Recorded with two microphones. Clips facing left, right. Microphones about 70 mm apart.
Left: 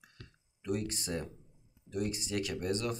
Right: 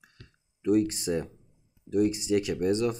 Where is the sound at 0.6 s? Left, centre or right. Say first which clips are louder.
Right 12 dB; centre.